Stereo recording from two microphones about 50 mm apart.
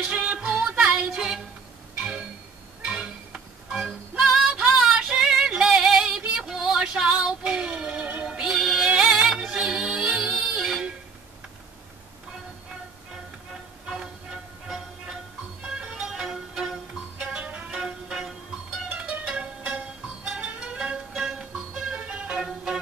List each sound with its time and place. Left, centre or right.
0.0 s music: centre
2.0 s a sound: centre
2.8 s music: centre
8.5 s music: centre
13.8 s music: centre
15.6 s music: centre